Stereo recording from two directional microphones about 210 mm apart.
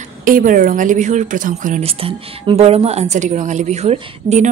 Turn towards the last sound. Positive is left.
turn(degrees=-30)  # may be behind; listen again after turning